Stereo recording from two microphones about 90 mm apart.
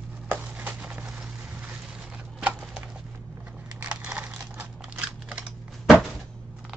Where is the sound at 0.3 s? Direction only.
20° right (ahead or behind).